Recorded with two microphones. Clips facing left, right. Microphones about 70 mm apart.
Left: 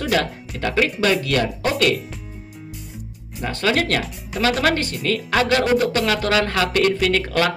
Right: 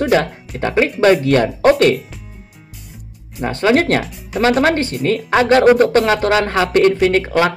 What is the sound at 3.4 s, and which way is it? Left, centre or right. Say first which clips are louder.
Speech: right 6 dB; right.